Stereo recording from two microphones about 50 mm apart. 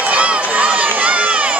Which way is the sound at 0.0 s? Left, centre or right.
Right.